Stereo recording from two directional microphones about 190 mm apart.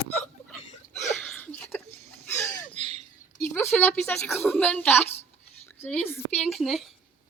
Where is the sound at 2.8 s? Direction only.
35° right (ahead or behind).